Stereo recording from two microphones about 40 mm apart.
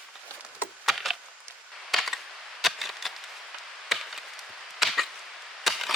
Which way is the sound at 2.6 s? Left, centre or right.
Centre.